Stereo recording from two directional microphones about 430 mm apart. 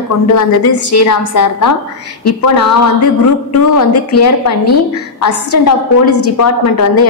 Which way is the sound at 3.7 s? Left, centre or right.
Left.